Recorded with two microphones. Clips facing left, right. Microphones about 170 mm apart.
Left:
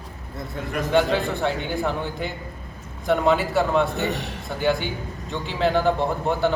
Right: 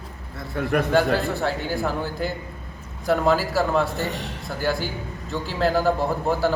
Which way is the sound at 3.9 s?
65° left (ahead or behind).